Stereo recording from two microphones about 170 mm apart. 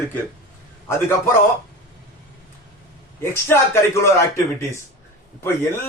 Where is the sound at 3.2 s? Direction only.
15° left (ahead or behind).